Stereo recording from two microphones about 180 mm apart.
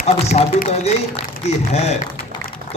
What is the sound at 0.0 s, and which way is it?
A man's voice, 35° left (ahead or behind).